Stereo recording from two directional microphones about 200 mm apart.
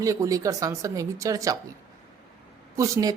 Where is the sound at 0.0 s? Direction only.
15° right (ahead or behind).